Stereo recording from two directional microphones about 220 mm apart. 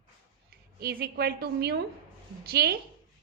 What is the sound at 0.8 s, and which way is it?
A woman's voice, 45° right (ahead or behind).